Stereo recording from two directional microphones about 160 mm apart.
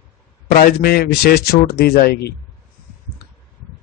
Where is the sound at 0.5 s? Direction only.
65° left (ahead or behind).